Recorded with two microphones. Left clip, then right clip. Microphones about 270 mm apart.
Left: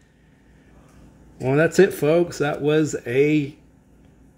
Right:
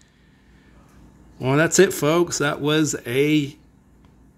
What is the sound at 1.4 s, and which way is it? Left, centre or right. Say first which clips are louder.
Speech: even; centre.